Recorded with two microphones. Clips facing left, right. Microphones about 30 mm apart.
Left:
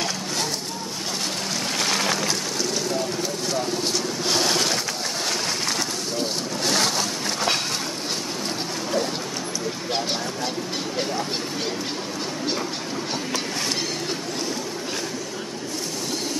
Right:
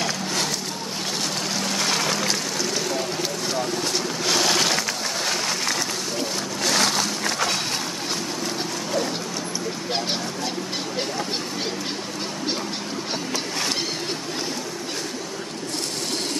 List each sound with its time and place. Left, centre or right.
1.8 s music: centre
4.5 s a sound: right
6.7 s vehicle: right